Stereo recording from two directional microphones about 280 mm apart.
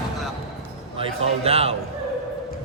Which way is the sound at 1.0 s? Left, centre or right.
Right.